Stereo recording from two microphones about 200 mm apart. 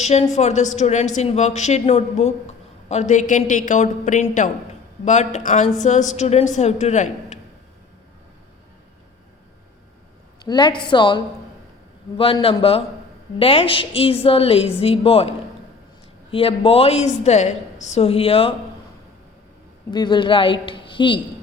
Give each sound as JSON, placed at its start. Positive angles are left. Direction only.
{"t": 0.0, "sound": "a woman's voice", "side_deg": 35}
{"t": 10.4, "sound": "a woman's voice", "side_deg": 20}
{"t": 19.9, "sound": "a woman's voice", "side_deg": 20}